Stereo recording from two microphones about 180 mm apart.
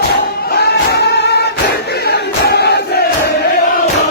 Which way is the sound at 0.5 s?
65° left (ahead or behind).